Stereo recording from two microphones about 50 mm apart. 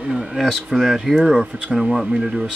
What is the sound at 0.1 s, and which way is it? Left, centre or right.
Speech, centre.